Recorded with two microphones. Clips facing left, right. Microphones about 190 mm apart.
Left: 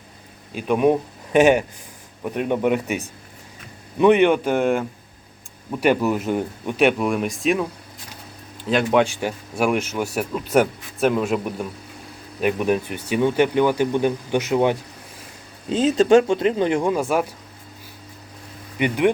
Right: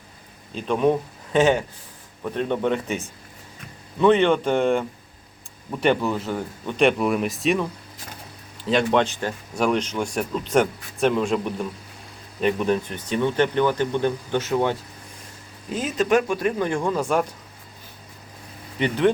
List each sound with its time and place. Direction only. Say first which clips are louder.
0.5 s speech: left 2 dB; 10° left (ahead or behind)
15.7 s speech: left 6 dB; 25° left (ahead or behind); by 17.3 s 5° left (ahead or behind)
18.8 s speech: left 1 dB; 10° left (ahead or behind)